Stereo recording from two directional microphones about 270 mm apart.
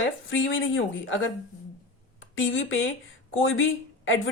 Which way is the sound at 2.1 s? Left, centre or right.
Left.